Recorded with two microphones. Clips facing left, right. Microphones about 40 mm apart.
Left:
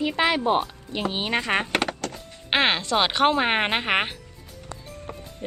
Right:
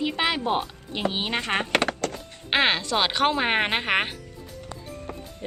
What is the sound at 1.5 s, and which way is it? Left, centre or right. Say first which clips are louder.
Speech: left 2 dB; centre.